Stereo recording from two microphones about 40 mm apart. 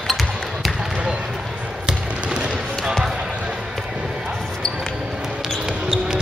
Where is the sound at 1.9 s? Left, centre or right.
Centre.